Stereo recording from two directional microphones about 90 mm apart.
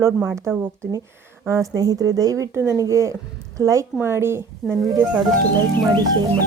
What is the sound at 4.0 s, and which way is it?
Speech, 30° right (ahead or behind).